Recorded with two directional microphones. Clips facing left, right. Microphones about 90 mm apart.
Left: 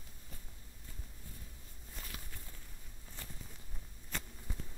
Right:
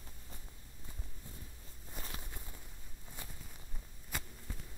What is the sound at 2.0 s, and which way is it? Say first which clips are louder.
Walk: even; 25° right (ahead or behind).